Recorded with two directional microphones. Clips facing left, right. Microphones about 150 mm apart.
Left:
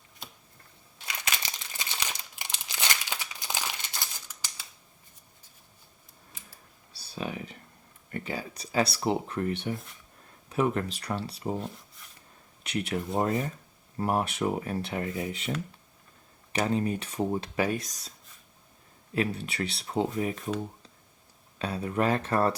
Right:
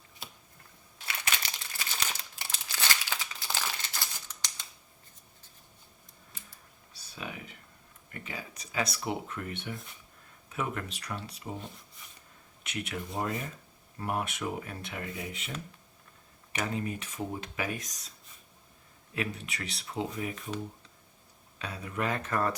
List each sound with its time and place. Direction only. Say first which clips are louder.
0.2 s a sound: left 1 dB; 5° right (ahead or behind)
1.0 s crumpling: left 1 dB; 15° left (ahead or behind)
4.3 s scissors: even; 5° left (ahead or behind)
6.9 s clicking: left 7 dB; 35° left (ahead or behind)
8.1 s speech: left 7 dB; 35° left (ahead or behind)
12.0 s a sound: even; centre (ahead or behind)
12.6 s speech: left 6 dB; 35° left (ahead or behind)
19.1 s speech: left 6 dB; 30° left (ahead or behind)
21.6 s speech: left 7 dB; 30° left (ahead or behind)